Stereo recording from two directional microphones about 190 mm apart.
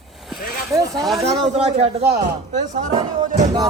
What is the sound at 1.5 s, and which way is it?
A man's voice, 35° right (ahead or behind).